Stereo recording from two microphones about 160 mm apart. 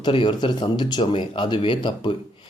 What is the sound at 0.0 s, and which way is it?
Speech, 30° left (ahead or behind).